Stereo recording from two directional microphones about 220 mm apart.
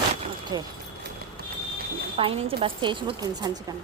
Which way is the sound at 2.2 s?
25° right (ahead or behind).